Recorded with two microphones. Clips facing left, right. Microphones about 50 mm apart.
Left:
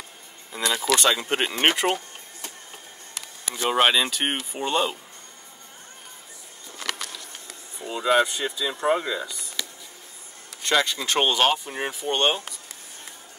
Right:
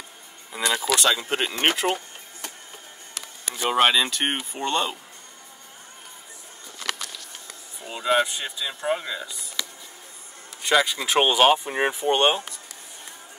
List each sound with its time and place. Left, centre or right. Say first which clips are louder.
0.5 s a sound: even; centre
1.4 s speech: left 3 dB; centre
3.5 s speech: even; centre
7.4 s speech: left 3 dB; centre
11.6 s speech: right 6 dB; right